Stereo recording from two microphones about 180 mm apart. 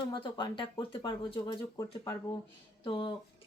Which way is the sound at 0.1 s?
25° left (ahead or behind).